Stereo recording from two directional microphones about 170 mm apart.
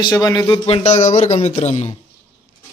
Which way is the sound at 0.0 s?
20° left (ahead or behind).